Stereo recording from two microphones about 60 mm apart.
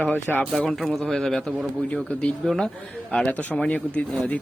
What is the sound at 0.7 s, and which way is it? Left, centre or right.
Speech, centre.